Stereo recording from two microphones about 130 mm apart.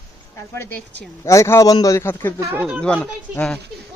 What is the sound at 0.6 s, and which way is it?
A man's voice, 15° left (ahead or behind).